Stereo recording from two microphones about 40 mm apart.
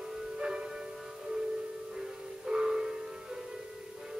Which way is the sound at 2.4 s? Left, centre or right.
Centre.